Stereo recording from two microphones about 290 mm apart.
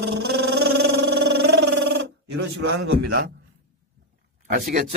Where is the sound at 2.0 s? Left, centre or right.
Right.